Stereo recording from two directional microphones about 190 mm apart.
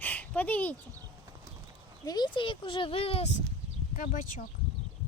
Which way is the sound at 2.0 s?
20° left (ahead or behind).